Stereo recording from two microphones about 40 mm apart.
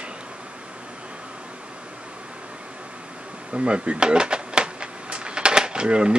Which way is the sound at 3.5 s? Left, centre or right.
Right.